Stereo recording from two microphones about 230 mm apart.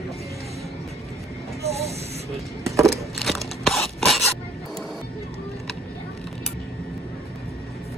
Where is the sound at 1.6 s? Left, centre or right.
Right.